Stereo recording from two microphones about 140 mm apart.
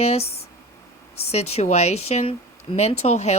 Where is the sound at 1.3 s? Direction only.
50° left (ahead or behind).